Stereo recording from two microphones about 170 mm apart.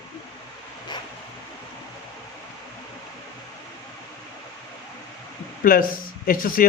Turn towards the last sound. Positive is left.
turn(degrees=55)  # may be behind; listen again after turning